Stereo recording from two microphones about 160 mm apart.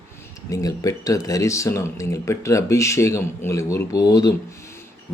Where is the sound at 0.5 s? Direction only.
20° left (ahead or behind).